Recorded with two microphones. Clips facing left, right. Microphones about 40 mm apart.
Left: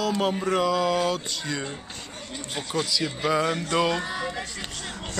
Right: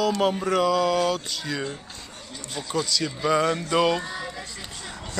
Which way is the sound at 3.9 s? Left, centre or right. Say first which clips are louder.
Right 1 dB; left.